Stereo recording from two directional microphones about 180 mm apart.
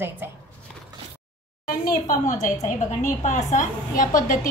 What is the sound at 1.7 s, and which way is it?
A woman's voice, 45° left (ahead or behind).